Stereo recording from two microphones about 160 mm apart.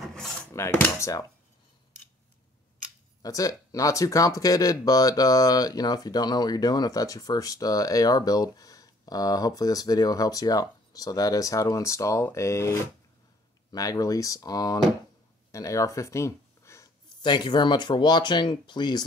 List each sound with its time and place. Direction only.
0.0 s filing: centre (ahead or behind)
0.5 s speech: 15° left (ahead or behind)
3.2 s speech: 20° left (ahead or behind)